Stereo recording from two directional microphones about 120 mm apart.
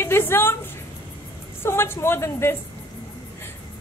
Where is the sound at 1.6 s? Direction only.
20° left (ahead or behind).